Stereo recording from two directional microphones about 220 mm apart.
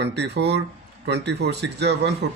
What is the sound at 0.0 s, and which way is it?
Speech, 50° right (ahead or behind).